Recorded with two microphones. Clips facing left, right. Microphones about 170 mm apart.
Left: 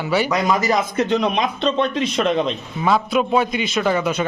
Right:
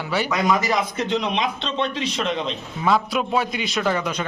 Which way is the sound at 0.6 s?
45° left (ahead or behind).